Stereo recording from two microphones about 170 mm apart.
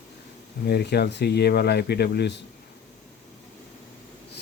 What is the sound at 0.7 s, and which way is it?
Speech, 70° left (ahead or behind).